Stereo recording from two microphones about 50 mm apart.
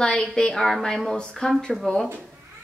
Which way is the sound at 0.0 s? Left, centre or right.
Centre.